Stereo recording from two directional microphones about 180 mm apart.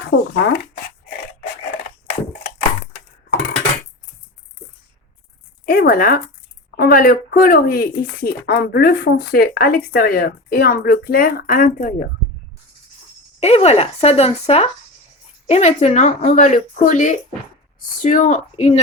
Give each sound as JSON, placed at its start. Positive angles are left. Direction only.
{"t": 0.1, "sound": "speech", "side_deg": 70}
{"t": 0.5, "sound": "a sound", "side_deg": 50}
{"t": 5.6, "sound": "speech", "side_deg": 55}
{"t": 13.4, "sound": "speech", "side_deg": 35}